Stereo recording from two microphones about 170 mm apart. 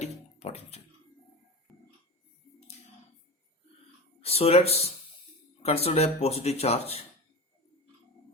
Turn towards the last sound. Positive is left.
turn(degrees=35)  # may be behind; listen again after turning